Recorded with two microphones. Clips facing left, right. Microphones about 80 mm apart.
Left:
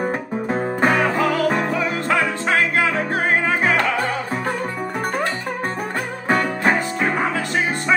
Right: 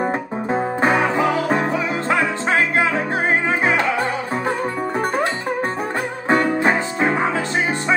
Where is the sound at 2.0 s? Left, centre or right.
Right.